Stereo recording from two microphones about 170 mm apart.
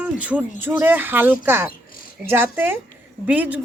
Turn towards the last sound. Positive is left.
turn(degrees=-10)  # may be behind; listen again after turning